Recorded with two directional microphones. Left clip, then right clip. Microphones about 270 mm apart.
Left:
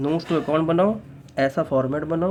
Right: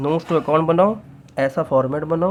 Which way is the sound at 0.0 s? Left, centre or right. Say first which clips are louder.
Right 4 dB; right.